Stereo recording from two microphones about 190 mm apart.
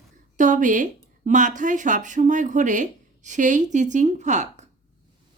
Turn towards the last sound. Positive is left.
turn(degrees=-40)  # may be behind; listen again after turning